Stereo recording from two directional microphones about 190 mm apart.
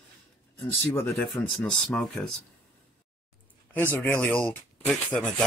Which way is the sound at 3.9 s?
10° left (ahead or behind).